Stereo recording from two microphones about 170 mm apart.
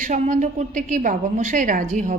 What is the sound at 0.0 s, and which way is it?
A woman's voice, 45° right (ahead or behind).